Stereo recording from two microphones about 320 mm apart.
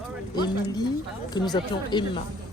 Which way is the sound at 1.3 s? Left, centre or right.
Centre.